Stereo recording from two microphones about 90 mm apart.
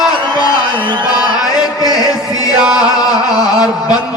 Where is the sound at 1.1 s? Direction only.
45° left (ahead or behind).